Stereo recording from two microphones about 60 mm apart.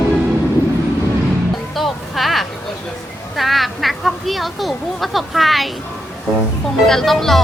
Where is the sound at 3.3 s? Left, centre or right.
Centre.